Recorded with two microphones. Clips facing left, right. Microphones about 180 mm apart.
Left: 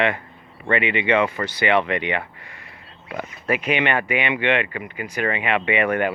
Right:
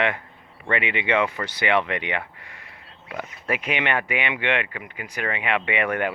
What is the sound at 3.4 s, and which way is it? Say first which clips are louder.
Speech: left 4 dB; 15° right (ahead or behind).